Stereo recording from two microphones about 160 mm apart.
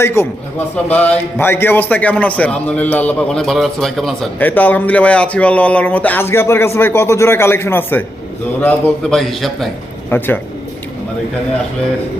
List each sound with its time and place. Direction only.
0.0 s a man's voice: 15° left (ahead or behind); by 9.6 s centre (ahead or behind)
10.1 s a man's voice: 10° left (ahead or behind)